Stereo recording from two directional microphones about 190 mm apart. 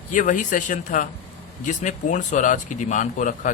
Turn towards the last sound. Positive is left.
turn(degrees=45)  # may be behind; listen again after turning